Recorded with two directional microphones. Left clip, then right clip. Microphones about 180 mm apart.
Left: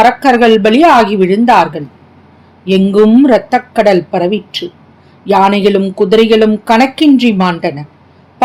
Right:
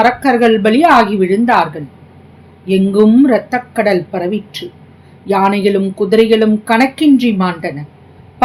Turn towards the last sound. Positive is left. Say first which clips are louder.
# left 4 dB
turn(degrees=50)  # may be behind; listen again after turning